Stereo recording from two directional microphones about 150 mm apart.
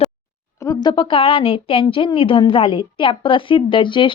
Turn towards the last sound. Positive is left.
turn(degrees=35)  # may be behind; listen again after turning